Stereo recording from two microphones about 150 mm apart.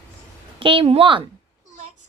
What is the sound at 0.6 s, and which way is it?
Speech, 35° right (ahead or behind).